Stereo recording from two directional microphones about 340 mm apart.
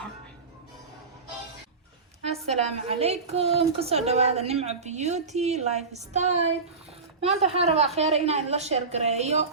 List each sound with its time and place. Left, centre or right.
2.3 s a woman's voice: centre